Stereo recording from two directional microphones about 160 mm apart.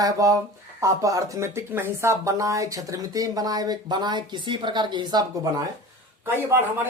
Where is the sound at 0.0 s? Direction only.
20° right (ahead or behind).